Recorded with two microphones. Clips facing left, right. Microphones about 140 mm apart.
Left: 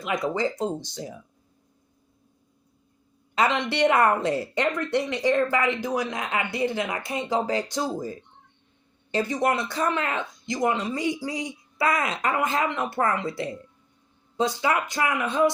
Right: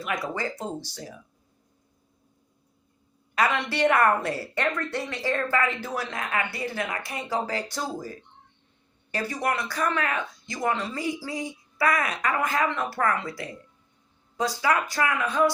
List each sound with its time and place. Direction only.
0.0 s a woman's voice: 20° left (ahead or behind)
3.3 s a woman's voice: 20° left (ahead or behind)